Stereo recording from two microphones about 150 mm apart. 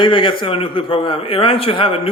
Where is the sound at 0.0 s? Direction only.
35° left (ahead or behind).